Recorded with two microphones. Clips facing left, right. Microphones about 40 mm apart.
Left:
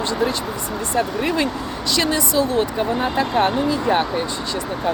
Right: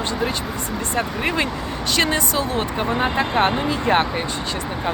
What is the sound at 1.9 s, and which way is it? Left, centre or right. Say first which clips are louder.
Speech: left 1 dB; right.